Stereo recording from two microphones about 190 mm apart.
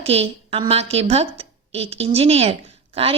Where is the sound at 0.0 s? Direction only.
30° right (ahead or behind).